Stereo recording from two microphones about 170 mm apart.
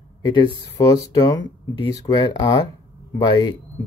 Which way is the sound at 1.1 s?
25° left (ahead or behind).